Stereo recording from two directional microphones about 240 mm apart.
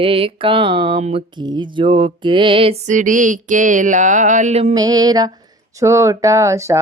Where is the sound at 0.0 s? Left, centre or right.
Right.